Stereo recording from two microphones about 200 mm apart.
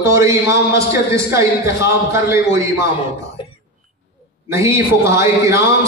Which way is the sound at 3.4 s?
25° left (ahead or behind).